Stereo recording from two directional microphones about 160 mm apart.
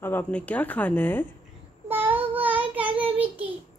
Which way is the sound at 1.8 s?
10° right (ahead or behind).